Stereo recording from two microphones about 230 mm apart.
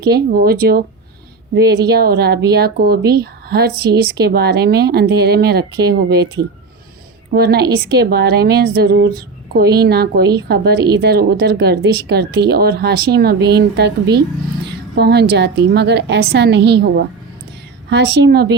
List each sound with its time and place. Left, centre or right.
0.0 s speech: right
7.3 s speech: right